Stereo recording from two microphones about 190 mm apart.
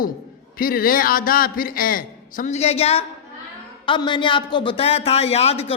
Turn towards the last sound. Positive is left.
turn(degrees=30)  # may be behind; listen again after turning